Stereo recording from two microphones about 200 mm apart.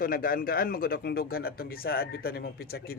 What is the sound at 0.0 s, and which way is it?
A man's voice, 45° left (ahead or behind).